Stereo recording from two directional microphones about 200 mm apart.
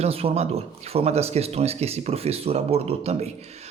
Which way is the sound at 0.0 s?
30° right (ahead or behind).